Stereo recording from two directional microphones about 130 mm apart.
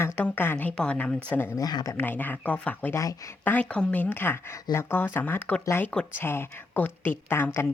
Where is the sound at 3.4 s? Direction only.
10° left (ahead or behind).